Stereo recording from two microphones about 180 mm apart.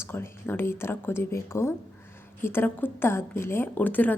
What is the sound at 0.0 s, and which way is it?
A woman's voice, 10° left (ahead or behind).